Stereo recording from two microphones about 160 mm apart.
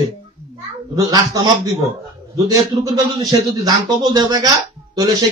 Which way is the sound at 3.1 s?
25° right (ahead or behind).